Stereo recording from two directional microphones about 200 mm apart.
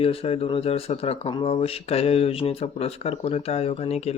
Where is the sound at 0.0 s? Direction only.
30° left (ahead or behind).